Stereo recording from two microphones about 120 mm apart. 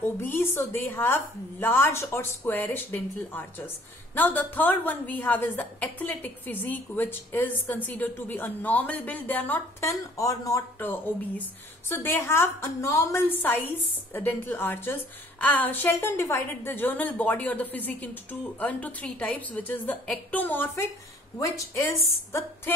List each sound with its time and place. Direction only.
0.0 s a woman's voice: 20° left (ahead or behind)